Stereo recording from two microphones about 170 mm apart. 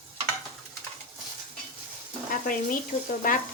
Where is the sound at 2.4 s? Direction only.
55° left (ahead or behind).